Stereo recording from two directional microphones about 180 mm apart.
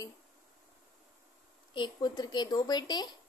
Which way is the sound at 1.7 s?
25° left (ahead or behind).